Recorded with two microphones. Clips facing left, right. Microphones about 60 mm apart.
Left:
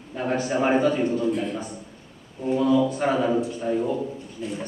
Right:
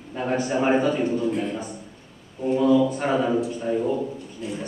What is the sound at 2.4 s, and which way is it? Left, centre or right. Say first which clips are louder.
A man's voice: right 2 dB; centre.